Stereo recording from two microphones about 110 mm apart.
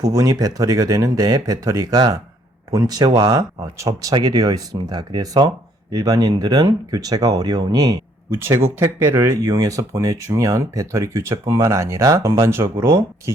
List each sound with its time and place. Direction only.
0.0 s speech: 35° right (ahead or behind)
8.4 s speech: 20° right (ahead or behind)